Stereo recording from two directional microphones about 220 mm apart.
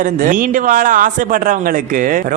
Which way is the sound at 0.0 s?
35° right (ahead or behind).